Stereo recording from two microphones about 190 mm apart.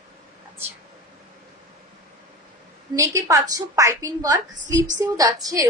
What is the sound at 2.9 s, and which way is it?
A woman's voice, 15° right (ahead or behind).